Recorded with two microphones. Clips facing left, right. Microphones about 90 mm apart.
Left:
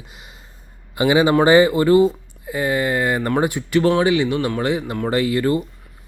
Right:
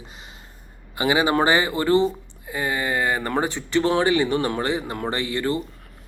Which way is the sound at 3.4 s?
15° left (ahead or behind).